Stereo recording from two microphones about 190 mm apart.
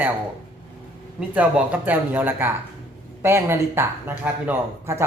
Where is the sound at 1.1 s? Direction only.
10° right (ahead or behind).